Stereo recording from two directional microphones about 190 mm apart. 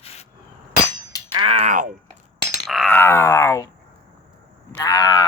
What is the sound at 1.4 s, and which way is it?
Typing, 30° right (ahead or behind).